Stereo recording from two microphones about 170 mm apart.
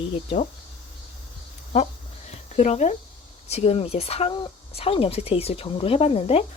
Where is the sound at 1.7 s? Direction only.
40° left (ahead or behind).